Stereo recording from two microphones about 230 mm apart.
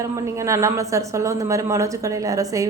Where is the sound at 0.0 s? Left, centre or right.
Centre.